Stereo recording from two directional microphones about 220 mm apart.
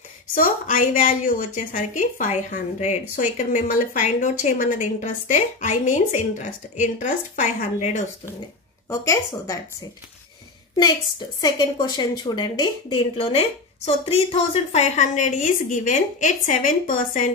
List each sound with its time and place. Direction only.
0.3 s a woman's voice: 40° left (ahead or behind)
8.8 s speech: 15° left (ahead or behind)
10.8 s a woman's voice: 20° left (ahead or behind); by 17.3 s 35° left (ahead or behind)